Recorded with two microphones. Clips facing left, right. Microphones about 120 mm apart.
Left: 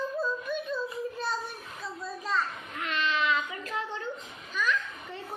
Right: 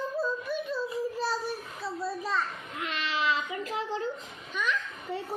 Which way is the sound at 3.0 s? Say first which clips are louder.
Left 1 dB; 30° right (ahead or behind).